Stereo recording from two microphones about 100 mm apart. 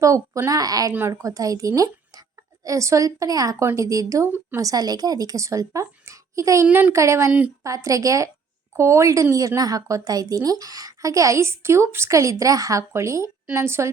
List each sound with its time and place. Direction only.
0.0 s a woman's voice: 30° right (ahead or behind)
6.7 s speech: 15° right (ahead or behind)
6.9 s a woman's voice: 30° right (ahead or behind)